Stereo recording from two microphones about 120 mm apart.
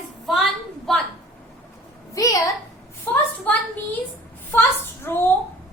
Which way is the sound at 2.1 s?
30° left (ahead or behind).